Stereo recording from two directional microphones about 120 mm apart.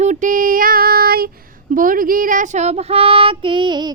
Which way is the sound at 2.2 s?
90° right.